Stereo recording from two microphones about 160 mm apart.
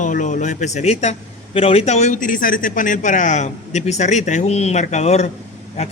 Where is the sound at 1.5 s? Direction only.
40° left (ahead or behind).